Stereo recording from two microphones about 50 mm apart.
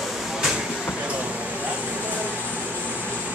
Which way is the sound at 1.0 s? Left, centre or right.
Right.